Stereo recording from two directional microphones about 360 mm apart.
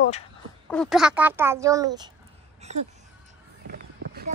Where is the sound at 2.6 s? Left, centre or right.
Centre.